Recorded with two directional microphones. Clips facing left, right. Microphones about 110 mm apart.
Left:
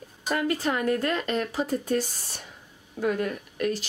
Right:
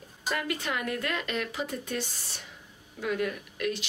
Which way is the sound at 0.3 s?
35° left (ahead or behind).